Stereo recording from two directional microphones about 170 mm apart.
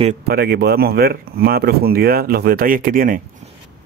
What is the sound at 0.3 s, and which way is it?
Speech, 65° right (ahead or behind).